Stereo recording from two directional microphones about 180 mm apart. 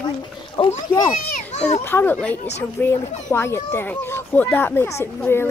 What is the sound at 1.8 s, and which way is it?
Speech, 10° left (ahead or behind).